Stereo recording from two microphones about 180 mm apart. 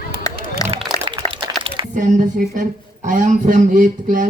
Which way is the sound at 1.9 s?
45° right (ahead or behind).